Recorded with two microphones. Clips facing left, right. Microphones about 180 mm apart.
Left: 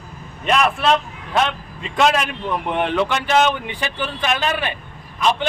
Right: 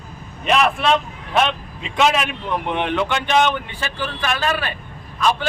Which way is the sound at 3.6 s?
20° left (ahead or behind).